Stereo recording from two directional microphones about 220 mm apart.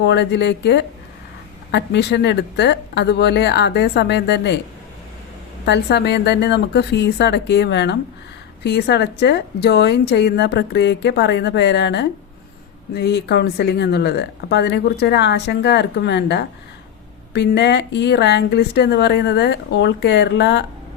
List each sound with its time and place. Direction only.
0.0 s speech: 50° left (ahead or behind)
5.6 s speech: 50° left (ahead or behind)